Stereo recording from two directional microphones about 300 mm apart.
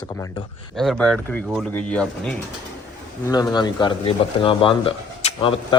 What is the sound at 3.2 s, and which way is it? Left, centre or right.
Speech, centre.